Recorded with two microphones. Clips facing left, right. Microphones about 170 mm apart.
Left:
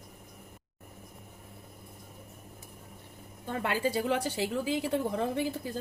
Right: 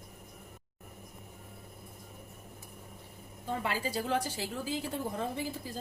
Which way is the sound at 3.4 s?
60° left (ahead or behind).